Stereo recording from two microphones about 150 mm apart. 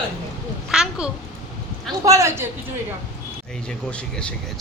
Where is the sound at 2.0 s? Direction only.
20° right (ahead or behind).